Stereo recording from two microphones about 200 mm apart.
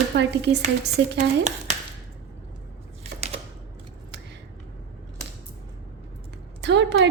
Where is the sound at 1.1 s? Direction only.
35° right (ahead or behind).